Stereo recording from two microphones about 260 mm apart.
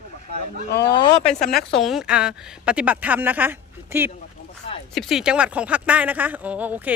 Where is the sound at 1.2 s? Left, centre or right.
Centre.